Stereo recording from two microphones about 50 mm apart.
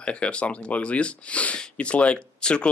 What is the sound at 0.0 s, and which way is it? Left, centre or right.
Speech, left.